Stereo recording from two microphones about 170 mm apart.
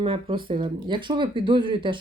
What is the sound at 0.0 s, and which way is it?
Speech, 30° right (ahead or behind).